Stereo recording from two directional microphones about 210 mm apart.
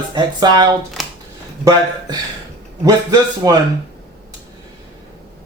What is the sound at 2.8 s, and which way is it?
Speech, 15° right (ahead or behind).